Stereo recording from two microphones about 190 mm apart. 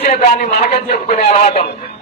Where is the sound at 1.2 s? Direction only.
40° left (ahead or behind).